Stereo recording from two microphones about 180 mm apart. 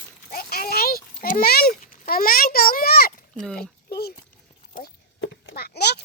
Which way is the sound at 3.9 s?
60° left (ahead or behind).